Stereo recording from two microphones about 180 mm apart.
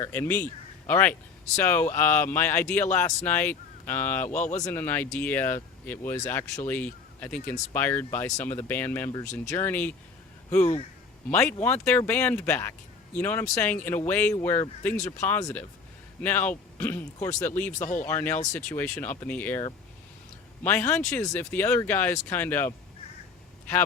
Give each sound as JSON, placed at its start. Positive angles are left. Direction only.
{"t": 0.0, "sound": "speech", "side_deg": 10}
{"t": 4.4, "sound": "speech", "side_deg": 40}
{"t": 4.6, "sound": "speech", "side_deg": 10}
{"t": 10.6, "sound": "speech", "side_deg": 35}
{"t": 11.3, "sound": "speech", "side_deg": 10}
{"t": 17.7, "sound": "speech", "side_deg": 45}
{"t": 18.0, "sound": "speech", "side_deg": 10}
{"t": 20.7, "sound": "speech", "side_deg": 10}